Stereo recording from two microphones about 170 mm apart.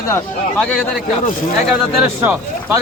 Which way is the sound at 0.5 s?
5° left (ahead or behind).